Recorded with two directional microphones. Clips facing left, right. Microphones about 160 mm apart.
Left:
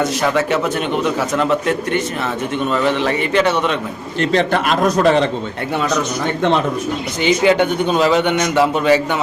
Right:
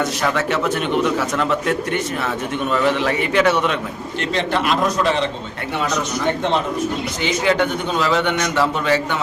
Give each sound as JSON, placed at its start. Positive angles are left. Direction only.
{"t": 0.2, "sound": "a man's voice", "side_deg": 0}
{"t": 4.2, "sound": "a man's voice", "side_deg": 45}
{"t": 7.2, "sound": "a man's voice", "side_deg": 20}